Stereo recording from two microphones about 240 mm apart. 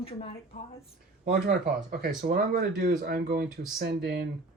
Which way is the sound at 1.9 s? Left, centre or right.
Right.